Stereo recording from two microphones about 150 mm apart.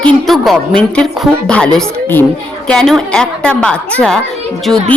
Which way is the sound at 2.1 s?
10° left (ahead or behind).